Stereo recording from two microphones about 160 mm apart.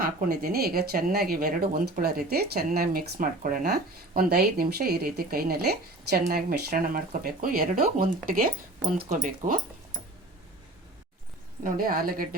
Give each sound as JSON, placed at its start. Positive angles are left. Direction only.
{"t": 0.0, "sound": "speech", "side_deg": -70}
{"t": 9.0, "sound": "speech", "side_deg": -50}
{"t": 11.6, "sound": "a woman's voice", "side_deg": -65}